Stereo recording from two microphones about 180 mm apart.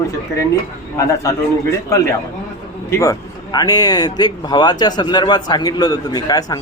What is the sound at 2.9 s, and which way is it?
Speech, 15° left (ahead or behind).